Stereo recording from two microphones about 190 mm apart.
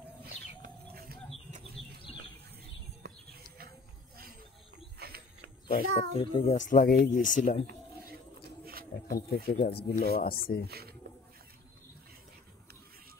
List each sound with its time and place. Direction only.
4.9 s a sound: 55° right (ahead or behind)
5.7 s speech: 50° left (ahead or behind)
6.1 s speech: 35° left (ahead or behind)
9.0 s speech: 50° left (ahead or behind)
10.7 s speech: 55° right (ahead or behind)